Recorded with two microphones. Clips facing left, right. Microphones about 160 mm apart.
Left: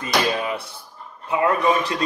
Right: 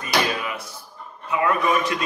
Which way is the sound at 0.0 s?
30° left (ahead or behind).